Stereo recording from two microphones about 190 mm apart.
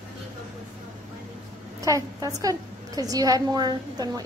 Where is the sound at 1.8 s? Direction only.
15° right (ahead or behind).